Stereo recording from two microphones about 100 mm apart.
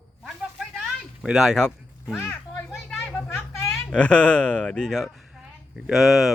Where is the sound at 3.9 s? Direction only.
10° left (ahead or behind).